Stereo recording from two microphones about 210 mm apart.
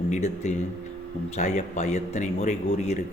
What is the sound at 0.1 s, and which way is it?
A man's voice, 35° left (ahead or behind).